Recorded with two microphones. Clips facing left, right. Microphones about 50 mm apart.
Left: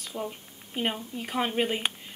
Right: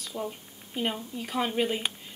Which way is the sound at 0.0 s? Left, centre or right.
Centre.